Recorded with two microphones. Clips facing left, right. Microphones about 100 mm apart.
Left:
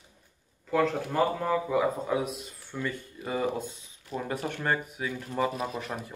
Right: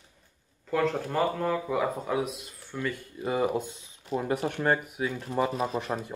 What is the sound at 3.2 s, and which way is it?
Speech, 15° right (ahead or behind).